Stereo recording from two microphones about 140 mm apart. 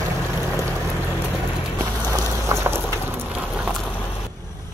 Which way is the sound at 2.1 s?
20° right (ahead or behind).